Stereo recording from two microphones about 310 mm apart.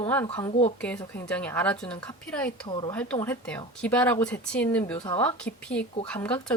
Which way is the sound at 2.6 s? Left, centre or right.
Centre.